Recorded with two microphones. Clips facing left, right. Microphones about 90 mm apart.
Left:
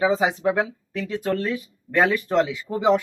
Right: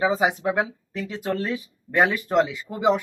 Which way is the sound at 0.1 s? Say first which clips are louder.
Left 1 dB; 15° right (ahead or behind).